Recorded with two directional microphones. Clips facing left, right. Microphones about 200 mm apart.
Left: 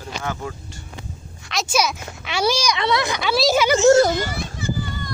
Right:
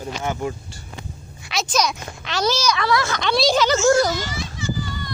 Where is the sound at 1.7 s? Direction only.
10° left (ahead or behind).